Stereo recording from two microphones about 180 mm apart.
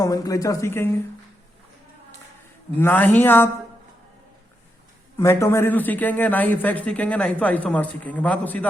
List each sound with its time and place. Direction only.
0.0 s speech: 20° left (ahead or behind)
2.7 s a man's voice: 10° left (ahead or behind)
5.1 s a man's voice: 15° left (ahead or behind)